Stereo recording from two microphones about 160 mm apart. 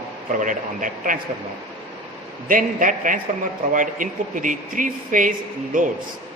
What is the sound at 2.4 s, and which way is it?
A man's voice, 60° right (ahead or behind).